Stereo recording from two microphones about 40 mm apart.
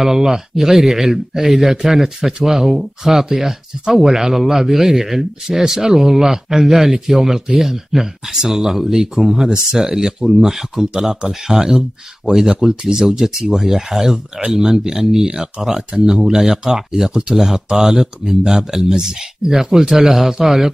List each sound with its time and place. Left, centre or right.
0.0 s speech: centre